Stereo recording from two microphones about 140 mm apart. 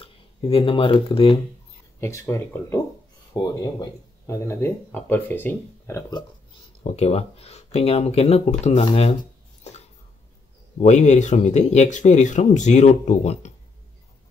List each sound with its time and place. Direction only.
0.0 s speech: 40° left (ahead or behind)
2.0 s speech: 20° left (ahead or behind)
6.8 s speech: 50° left (ahead or behind)
10.8 s speech: 55° left (ahead or behind)